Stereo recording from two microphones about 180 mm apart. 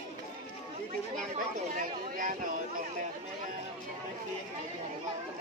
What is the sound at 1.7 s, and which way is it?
Speech, 45° right (ahead or behind).